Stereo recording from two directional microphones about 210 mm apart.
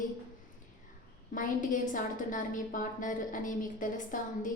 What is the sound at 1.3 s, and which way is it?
A woman's voice, 40° left (ahead or behind).